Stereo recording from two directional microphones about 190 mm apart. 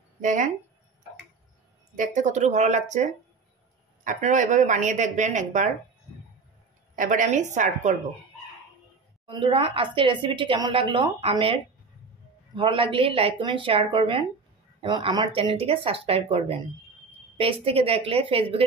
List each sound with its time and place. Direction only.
0.2 s speech: 40° right (ahead or behind)
2.0 s a woman's voice: 40° right (ahead or behind)
7.0 s a woman's voice: 45° right (ahead or behind)
9.3 s a woman's voice: 25° right (ahead or behind)